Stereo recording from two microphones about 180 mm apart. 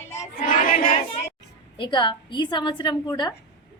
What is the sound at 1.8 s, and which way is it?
A woman's voice, 25° left (ahead or behind).